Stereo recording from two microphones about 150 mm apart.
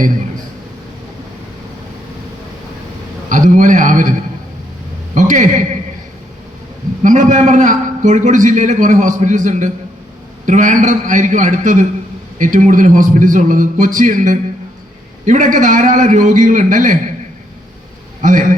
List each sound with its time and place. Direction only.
3.2 s a man's voice: 60° right (ahead or behind)
5.1 s a man's voice: 55° right (ahead or behind)
7.0 s a man's voice: 60° right (ahead or behind)
18.2 s a man's voice: 60° right (ahead or behind)